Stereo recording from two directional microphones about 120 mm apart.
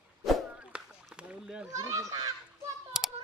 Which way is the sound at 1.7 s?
25° right (ahead or behind).